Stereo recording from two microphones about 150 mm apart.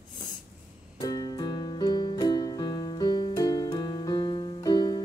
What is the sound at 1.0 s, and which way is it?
Music, 25° left (ahead or behind).